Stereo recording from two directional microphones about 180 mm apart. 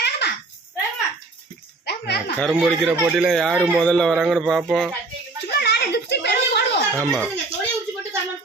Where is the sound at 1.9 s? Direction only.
65° left (ahead or behind).